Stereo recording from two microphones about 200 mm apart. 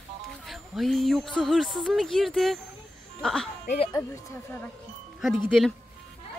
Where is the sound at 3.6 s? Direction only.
30° left (ahead or behind).